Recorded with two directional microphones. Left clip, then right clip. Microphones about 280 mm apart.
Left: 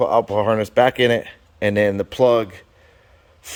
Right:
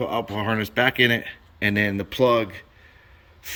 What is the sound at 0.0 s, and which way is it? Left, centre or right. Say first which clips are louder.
Speech: left 9 dB; centre.